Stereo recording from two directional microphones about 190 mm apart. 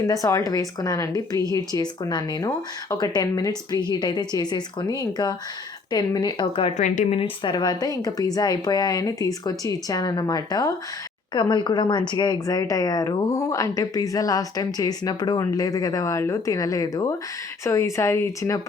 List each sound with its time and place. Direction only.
0.1 s speech: 15° left (ahead or behind)